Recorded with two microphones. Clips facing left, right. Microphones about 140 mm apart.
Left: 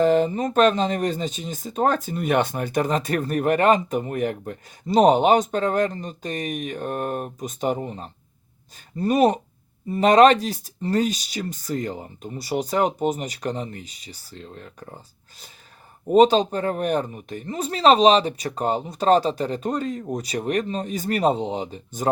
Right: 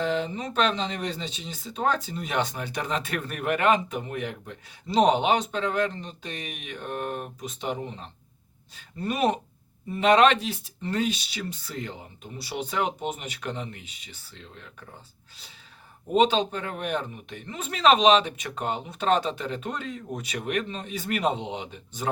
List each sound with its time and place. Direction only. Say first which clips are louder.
0.0 s speech: left 9 dB; 45° left (ahead or behind)
16.0 s speech: left 6 dB; 40° left (ahead or behind)